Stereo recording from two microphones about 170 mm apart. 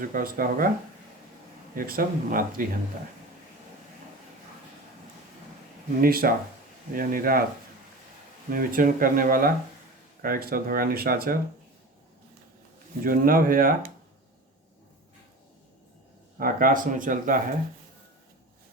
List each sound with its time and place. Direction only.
0.0 s speech: 55° right (ahead or behind)
1.7 s speech: 55° right (ahead or behind)
6.0 s speech: 60° right (ahead or behind)
8.4 s speech: 55° right (ahead or behind)
13.1 s speech: 55° right (ahead or behind)
16.4 s speech: 55° right (ahead or behind)